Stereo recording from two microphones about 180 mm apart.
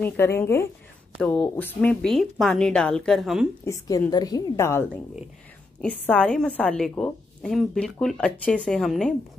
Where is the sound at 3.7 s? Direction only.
20° left (ahead or behind); by 9.1 s 5° left (ahead or behind).